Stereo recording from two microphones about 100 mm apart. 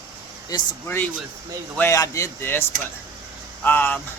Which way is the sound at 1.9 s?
35° left (ahead or behind).